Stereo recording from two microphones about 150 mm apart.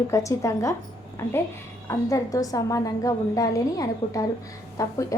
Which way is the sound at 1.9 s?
20° left (ahead or behind).